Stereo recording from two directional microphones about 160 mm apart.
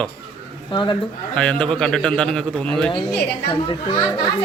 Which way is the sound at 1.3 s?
5° left (ahead or behind).